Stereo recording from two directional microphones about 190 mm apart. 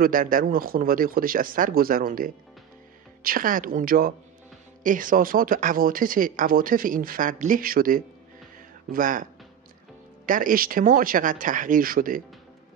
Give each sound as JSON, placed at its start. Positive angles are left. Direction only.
{"t": 0.0, "sound": "speech", "side_deg": -45}